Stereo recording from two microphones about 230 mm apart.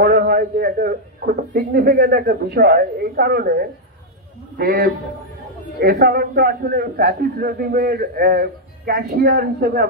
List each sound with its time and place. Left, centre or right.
0.0 s a man's voice: right